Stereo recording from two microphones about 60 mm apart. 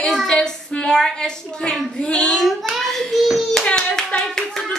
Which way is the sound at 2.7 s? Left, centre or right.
Centre.